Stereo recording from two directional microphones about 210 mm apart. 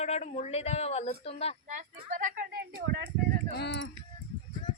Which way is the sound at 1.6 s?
35° right (ahead or behind).